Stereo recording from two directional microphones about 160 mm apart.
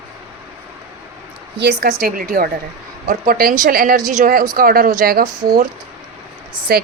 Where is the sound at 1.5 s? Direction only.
80° right.